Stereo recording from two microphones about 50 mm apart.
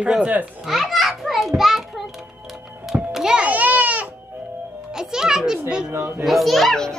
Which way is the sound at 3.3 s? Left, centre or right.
Right.